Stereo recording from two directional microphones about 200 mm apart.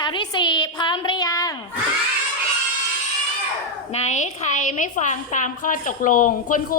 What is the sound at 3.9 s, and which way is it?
A woman's voice, 35° left (ahead or behind).